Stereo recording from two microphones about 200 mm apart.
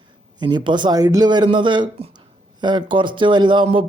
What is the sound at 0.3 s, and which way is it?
Speech, 20° right (ahead or behind).